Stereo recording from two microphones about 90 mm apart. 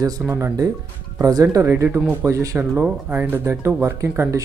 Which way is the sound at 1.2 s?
40° right (ahead or behind).